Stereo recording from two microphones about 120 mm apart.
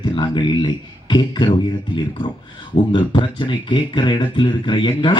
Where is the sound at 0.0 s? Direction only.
40° left (ahead or behind).